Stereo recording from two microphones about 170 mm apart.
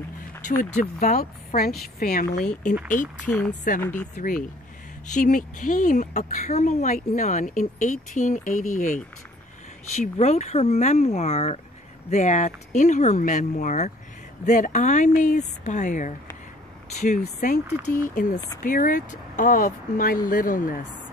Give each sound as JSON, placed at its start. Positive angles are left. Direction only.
{"t": 0.6, "sound": "speech", "side_deg": 50}
{"t": 3.3, "sound": "a woman's voice", "side_deg": 5}
{"t": 4.2, "sound": "a woman's voice", "side_deg": 55}
{"t": 17.4, "sound": "a woman's voice", "side_deg": 50}